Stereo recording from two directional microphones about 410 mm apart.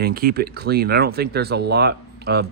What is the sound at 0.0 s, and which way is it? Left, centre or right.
Speech, right.